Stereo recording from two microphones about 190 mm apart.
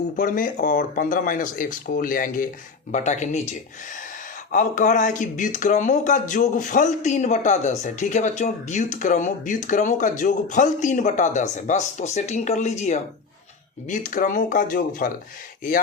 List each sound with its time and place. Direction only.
0.2 s speech: 45° left (ahead or behind)
4.5 s speech: 40° left (ahead or behind)